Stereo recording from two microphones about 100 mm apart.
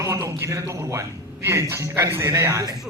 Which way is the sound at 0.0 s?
30° right (ahead or behind).